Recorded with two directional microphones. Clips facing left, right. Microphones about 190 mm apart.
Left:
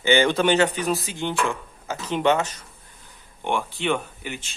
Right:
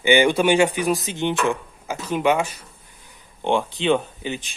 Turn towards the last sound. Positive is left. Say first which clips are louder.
# right 5 dB
turn(degrees=-20)  # may be behind; listen again after turning